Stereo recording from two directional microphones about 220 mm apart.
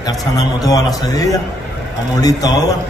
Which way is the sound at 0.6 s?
15° left (ahead or behind).